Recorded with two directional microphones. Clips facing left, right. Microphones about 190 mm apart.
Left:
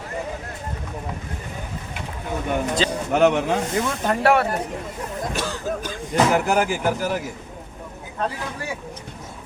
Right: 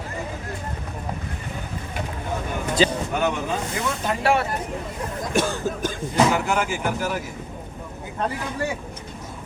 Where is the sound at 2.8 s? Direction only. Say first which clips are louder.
Right 9 dB; 10° right (ahead or behind).